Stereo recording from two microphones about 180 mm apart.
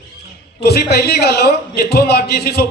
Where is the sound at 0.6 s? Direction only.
60° left (ahead or behind).